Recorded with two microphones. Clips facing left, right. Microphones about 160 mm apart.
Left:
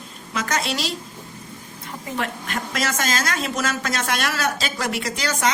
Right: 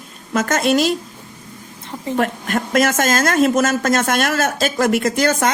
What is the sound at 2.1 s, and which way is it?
A woman's voice, 50° right (ahead or behind).